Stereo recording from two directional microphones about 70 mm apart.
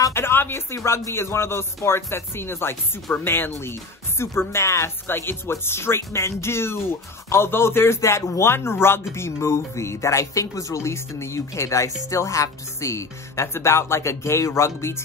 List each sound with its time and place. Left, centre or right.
0.1 s speech: left